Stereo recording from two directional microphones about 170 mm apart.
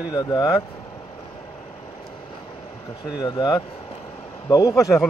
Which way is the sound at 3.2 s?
25° left (ahead or behind).